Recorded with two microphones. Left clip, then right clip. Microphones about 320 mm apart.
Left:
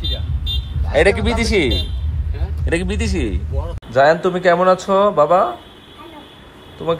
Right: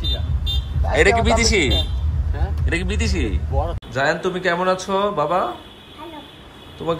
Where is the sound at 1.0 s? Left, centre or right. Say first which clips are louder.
Right 1 dB; centre.